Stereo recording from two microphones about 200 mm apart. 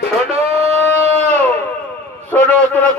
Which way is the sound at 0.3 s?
30° right (ahead or behind).